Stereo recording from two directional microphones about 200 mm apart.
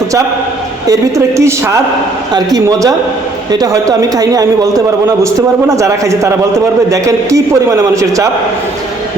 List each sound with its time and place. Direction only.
0.9 s a man's voice: 15° right (ahead or behind)